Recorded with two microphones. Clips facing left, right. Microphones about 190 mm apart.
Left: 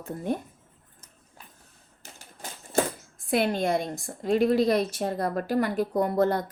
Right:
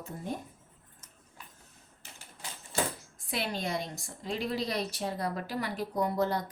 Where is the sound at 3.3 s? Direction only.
55° left (ahead or behind).